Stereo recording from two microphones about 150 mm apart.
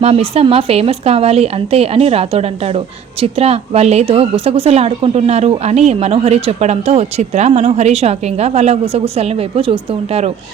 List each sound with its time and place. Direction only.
0.0 s speech: 45° right (ahead or behind)